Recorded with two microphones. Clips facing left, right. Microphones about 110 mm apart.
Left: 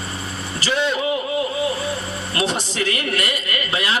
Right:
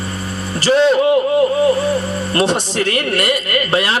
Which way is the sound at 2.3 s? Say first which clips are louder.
Right 6 dB; 35° right (ahead or behind).